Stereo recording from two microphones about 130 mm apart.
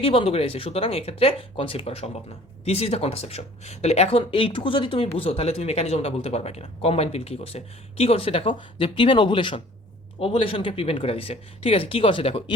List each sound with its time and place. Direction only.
0.0 s speech: 45° left (ahead or behind)